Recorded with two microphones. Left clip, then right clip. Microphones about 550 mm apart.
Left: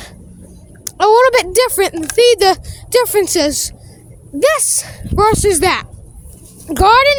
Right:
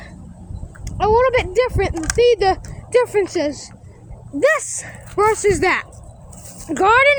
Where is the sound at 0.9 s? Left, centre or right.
Left.